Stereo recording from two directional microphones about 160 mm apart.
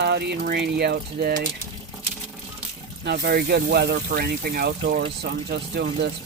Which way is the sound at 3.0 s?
80° right.